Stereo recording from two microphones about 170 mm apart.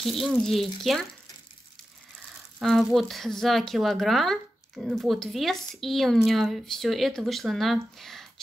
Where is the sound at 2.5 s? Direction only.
Centre (ahead or behind).